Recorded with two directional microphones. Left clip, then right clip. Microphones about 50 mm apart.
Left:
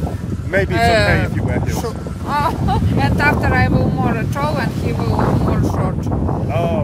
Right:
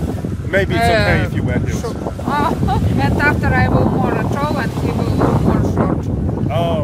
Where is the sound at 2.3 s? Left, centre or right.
Left.